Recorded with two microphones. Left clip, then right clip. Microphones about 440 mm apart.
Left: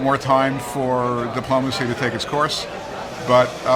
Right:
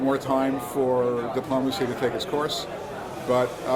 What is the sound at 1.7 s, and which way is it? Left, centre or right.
Speech, left.